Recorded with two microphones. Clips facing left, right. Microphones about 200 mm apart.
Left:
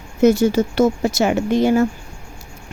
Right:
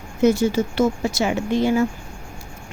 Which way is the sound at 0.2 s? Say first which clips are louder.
Left 3 dB; 40° left (ahead or behind).